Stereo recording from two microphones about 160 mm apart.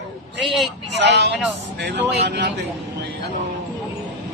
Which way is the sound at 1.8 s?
90° right.